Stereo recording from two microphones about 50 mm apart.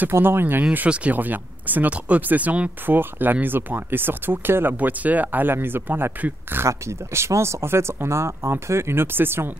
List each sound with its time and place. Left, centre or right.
0.2 s speech: right
0.8 s speech: right
2.9 s speech: right
4.7 s speech: right
6.7 s speech: right